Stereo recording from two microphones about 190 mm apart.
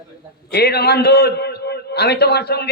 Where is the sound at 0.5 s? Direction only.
60° left (ahead or behind).